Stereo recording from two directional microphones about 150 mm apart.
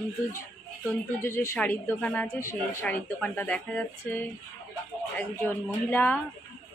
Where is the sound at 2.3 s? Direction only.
20° left (ahead or behind).